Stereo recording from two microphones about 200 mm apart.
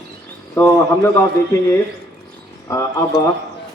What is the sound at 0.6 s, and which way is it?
Speech, 15° left (ahead or behind).